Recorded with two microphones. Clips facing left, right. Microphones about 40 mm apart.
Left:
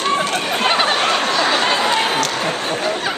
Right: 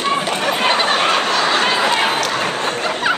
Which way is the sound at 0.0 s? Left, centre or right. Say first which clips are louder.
Right 1 dB; centre.